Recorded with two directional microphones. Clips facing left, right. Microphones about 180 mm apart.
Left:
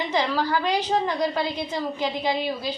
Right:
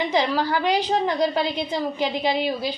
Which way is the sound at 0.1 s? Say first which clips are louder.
Right 2 dB; 15° right (ahead or behind).